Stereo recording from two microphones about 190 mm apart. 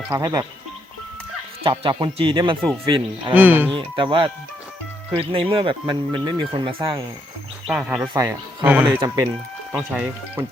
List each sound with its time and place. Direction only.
0.2 s speech: 20° right (ahead or behind)
1.6 s speech: 25° right (ahead or behind)
3.3 s speech: 10° right (ahead or behind)
3.8 s speech: 25° right (ahead or behind)
7.7 s speech: 5° right (ahead or behind)
9.7 s speech: 5° right (ahead or behind)